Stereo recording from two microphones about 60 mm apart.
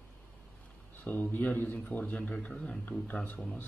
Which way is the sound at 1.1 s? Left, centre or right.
Left.